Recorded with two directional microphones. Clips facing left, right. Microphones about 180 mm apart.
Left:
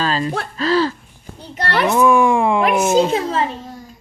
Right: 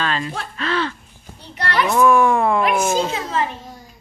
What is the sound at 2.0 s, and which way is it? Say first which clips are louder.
Speech: even; 15° left (ahead or behind).